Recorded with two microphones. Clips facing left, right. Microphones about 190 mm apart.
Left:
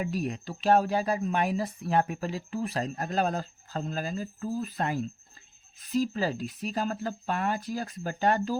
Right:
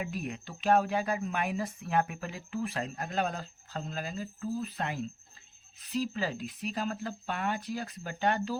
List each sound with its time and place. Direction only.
0.0 s speech: 40° left (ahead or behind)